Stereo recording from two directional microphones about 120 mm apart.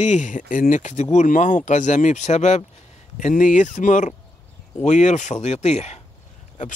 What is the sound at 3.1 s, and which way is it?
Speech, 90° left.